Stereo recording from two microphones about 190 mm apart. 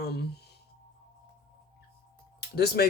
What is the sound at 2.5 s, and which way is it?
Speech, 55° left (ahead or behind).